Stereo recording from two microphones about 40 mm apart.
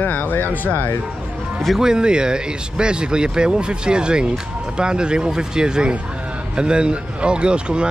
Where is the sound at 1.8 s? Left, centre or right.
Centre.